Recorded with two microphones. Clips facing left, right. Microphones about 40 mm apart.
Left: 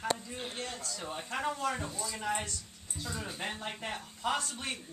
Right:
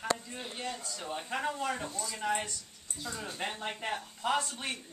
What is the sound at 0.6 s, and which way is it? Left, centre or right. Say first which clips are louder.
A woman's voice: right 1 dB; centre.